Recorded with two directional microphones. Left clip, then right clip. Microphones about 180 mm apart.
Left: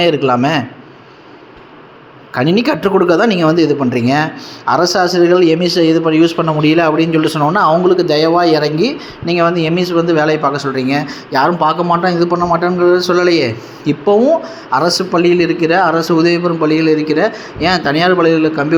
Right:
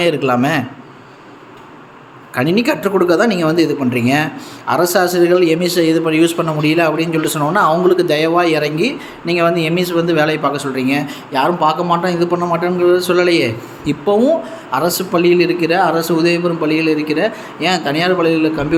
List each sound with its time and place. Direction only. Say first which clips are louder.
0.0 s speech: left 2 dB; 5° left (ahead or behind)
2.3 s speech: left 2 dB; 10° left (ahead or behind)
12.3 s speech: left 3 dB; centre (ahead or behind)
14.8 s a man's voice: left 3 dB; 10° right (ahead or behind)
15.1 s speech: right 2 dB; 5° left (ahead or behind)